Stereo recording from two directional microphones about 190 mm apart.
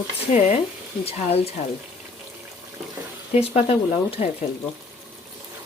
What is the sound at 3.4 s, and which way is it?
Speech, 30° left (ahead or behind).